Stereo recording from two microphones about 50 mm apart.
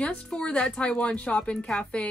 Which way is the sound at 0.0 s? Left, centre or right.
Left.